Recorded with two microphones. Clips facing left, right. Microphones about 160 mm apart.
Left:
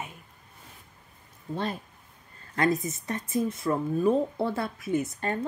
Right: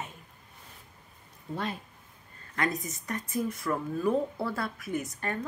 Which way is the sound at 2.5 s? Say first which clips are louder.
Left 6 dB; 30° left (ahead or behind).